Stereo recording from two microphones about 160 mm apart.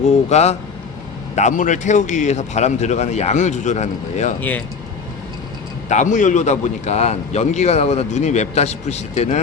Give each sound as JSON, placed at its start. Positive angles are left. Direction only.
{"t": 0.0, "sound": "a man's voice", "side_deg": 45}
{"t": 4.4, "sound": "speech", "side_deg": 10}
{"t": 5.9, "sound": "a man's voice", "side_deg": 50}